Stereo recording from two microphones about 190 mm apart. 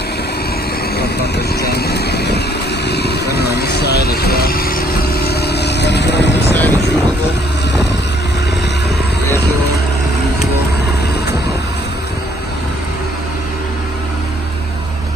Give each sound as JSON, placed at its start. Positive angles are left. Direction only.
{"t": 1.6, "sound": "vehicle", "side_deg": 55}
{"t": 6.5, "sound": "helicopter", "side_deg": 10}